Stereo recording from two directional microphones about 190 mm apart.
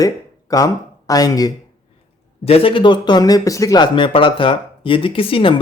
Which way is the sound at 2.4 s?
30° left (ahead or behind).